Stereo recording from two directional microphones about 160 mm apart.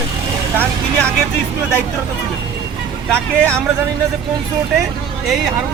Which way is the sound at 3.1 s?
5° left (ahead or behind).